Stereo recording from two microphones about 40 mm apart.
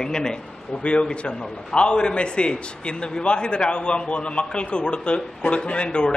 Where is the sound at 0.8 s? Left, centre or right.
Left.